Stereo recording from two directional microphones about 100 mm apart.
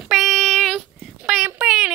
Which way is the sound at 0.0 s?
5° right (ahead or behind).